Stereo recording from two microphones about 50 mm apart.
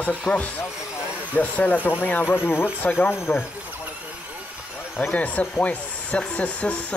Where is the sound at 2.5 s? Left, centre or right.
Left.